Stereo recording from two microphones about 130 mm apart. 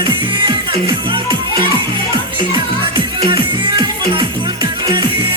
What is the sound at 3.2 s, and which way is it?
Music, 40° right (ahead or behind).